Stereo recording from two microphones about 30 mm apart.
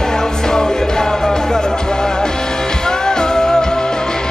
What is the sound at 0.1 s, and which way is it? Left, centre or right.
Music, centre.